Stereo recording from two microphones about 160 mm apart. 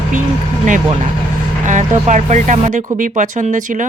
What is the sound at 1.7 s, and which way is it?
Speech, 50° right (ahead or behind).